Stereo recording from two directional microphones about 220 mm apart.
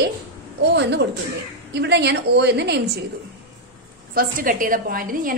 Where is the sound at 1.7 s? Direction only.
50° right (ahead or behind).